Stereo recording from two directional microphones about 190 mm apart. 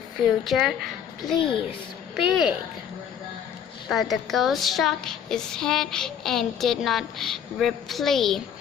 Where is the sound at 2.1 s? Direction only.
5° right (ahead or behind).